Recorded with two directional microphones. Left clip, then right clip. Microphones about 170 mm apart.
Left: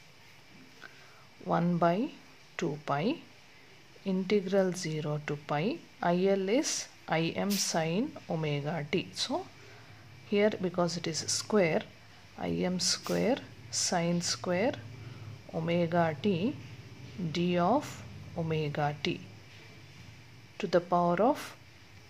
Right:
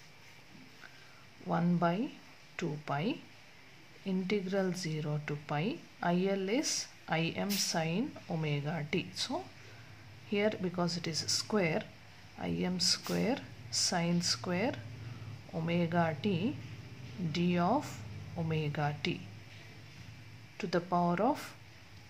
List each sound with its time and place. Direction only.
1.5 s speech: 15° left (ahead or behind)
20.5 s speech: 10° left (ahead or behind)